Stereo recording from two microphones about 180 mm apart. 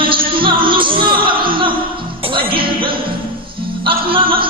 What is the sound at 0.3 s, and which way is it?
Music, 30° right (ahead or behind).